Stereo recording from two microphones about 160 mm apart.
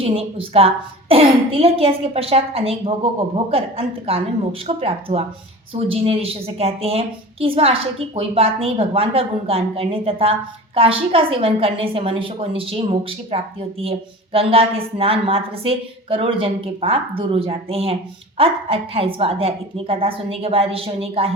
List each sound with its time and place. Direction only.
0.0 s a woman's voice: 35° right (ahead or behind)